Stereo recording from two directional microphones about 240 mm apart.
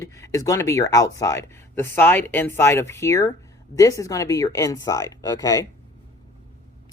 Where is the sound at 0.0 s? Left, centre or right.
Centre.